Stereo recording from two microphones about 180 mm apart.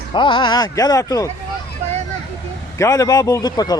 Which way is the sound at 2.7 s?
15° left (ahead or behind).